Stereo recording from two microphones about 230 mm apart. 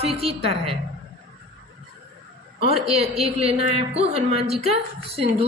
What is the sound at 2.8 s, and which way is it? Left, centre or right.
Speech, right.